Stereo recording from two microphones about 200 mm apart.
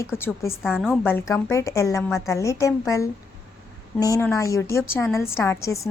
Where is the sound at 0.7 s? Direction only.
5° right (ahead or behind).